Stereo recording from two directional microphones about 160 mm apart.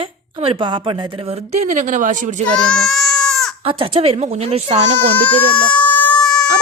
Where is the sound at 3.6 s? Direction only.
35° right (ahead or behind).